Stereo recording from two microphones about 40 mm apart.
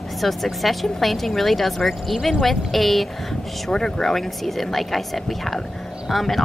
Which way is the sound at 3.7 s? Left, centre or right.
Centre.